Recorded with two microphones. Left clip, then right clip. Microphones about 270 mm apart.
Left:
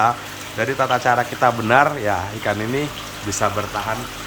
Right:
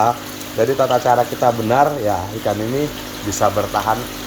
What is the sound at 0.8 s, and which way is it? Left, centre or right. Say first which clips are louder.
Speech: right 1 dB; centre.